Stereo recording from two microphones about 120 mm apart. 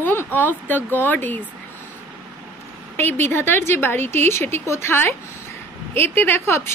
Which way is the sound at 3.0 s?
20° left (ahead or behind).